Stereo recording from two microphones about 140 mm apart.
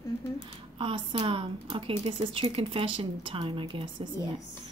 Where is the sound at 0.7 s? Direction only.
35° right (ahead or behind).